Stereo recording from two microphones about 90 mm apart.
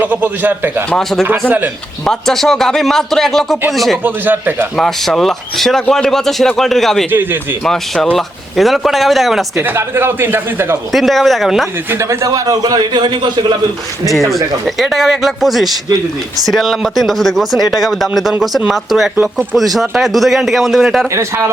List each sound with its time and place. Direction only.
0.0 s speech: 20° right (ahead or behind)
0.9 s speech: 5° left (ahead or behind)
1.5 s speech: 20° right (ahead or behind)
2.0 s speech: 5° left (ahead or behind)
4.0 s speech: 20° right (ahead or behind)
4.8 s speech: 5° left (ahead or behind)
7.1 s speech: 20° right (ahead or behind)
7.6 s speech: 5° left (ahead or behind)
9.6 s speech: 25° right (ahead or behind)
10.9 s speech: centre (ahead or behind)
11.9 s a man's voice: 35° right (ahead or behind); by 13.6 s 55° right (ahead or behind)
14.1 s speech: centre (ahead or behind)
21.1 s speech: 30° right (ahead or behind)